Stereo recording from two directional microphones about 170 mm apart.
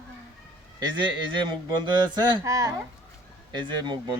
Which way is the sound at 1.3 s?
25° right (ahead or behind).